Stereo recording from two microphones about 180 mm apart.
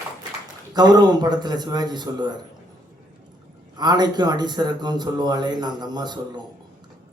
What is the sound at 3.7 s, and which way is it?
A man's voice, 25° right (ahead or behind).